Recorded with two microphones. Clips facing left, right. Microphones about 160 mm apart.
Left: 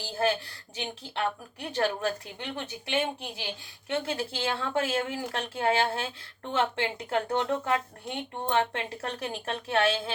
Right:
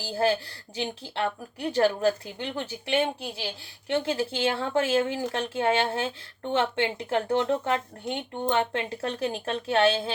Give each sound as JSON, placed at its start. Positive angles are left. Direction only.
{"t": 0.0, "sound": "speech", "side_deg": -35}